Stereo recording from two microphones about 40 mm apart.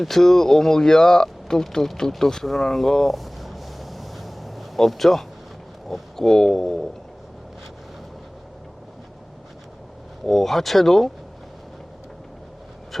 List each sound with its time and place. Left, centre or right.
0.0 s speech: centre
1.7 s a sound: centre
5.9 s speech: centre
10.2 s speech: centre